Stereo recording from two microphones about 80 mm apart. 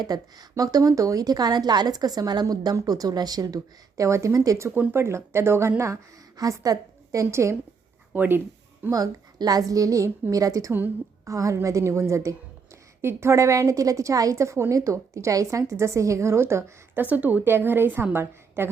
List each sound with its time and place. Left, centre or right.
0.0 s a woman's voice: right
6.3 s a woman's voice: right
8.1 s speech: right
8.9 s a woman's voice: right
10.7 s a woman's voice: right
11.3 s a woman's voice: right
17.0 s a woman's voice: right